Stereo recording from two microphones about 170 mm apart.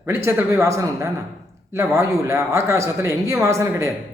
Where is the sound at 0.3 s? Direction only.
15° right (ahead or behind).